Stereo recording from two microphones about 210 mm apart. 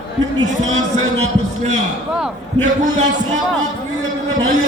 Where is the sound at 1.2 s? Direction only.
30° right (ahead or behind).